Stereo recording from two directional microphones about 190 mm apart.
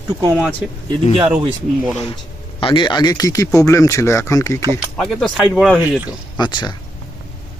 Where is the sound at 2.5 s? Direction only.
25° left (ahead or behind).